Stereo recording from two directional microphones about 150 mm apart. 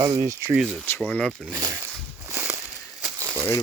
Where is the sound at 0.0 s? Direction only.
25° right (ahead or behind).